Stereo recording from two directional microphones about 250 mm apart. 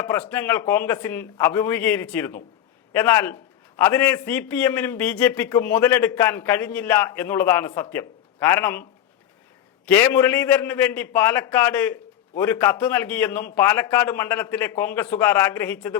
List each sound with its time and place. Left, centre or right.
0.0 s a man's voice: centre